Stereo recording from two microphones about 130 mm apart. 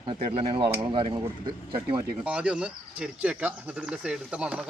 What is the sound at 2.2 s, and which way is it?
Speech, 10° right (ahead or behind).